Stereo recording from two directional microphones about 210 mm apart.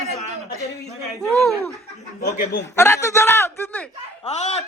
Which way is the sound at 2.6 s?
15° left (ahead or behind).